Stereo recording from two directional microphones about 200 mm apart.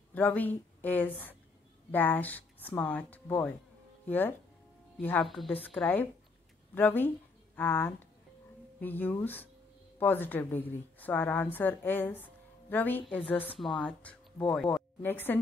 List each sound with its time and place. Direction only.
0.1 s a woman's voice: 10° left (ahead or behind)